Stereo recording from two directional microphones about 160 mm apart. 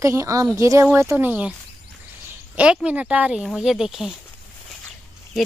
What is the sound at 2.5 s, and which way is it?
Speech, 5° right (ahead or behind).